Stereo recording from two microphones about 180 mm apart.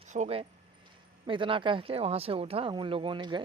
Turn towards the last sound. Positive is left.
turn(degrees=-25)  # may be behind; listen again after turning